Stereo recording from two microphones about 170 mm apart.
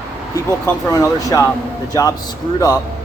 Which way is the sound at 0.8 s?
20° left (ahead or behind).